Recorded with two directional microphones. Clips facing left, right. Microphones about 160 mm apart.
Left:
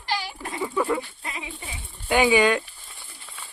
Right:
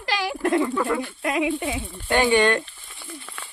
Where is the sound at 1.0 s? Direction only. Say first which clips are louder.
Right 12 dB; 75° right (ahead or behind).